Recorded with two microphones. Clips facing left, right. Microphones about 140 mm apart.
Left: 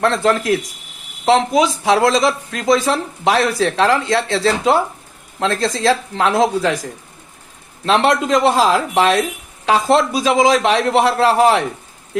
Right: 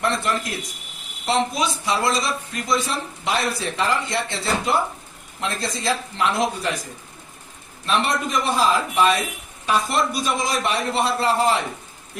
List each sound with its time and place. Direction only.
0.0 s a woman's voice: 90° left
7.9 s speech: 90° left